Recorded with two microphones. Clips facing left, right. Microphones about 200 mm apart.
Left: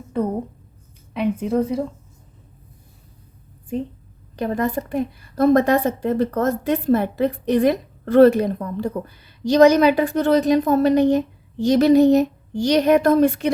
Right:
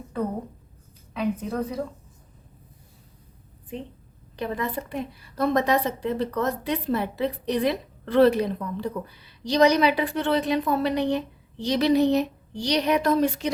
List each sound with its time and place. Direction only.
1.1 s a woman's voice: 25° left (ahead or behind)
3.7 s a woman's voice: 45° left (ahead or behind)